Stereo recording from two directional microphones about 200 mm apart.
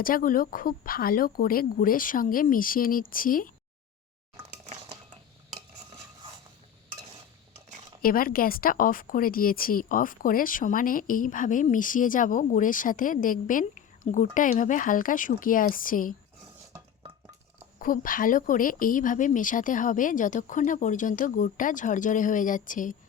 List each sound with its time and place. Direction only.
0.0 s a woman's voice: 45° left (ahead or behind)
4.5 s chink: 30° right (ahead or behind)
8.0 s a woman's voice: 45° left (ahead or behind)
17.7 s speech: 45° left (ahead or behind)